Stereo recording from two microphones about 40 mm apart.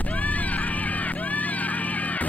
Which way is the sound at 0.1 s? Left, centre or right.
Left.